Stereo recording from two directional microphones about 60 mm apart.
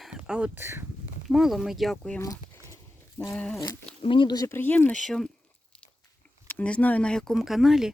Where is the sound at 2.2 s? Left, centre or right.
Left.